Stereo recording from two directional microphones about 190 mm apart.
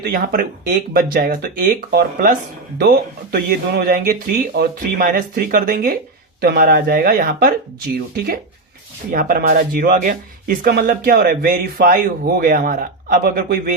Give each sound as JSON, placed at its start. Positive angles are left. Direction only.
{"t": 0.0, "sound": "speech", "side_deg": -50}
{"t": 9.1, "sound": "speech", "side_deg": -45}